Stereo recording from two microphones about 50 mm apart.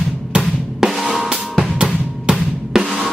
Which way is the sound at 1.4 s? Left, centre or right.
Centre.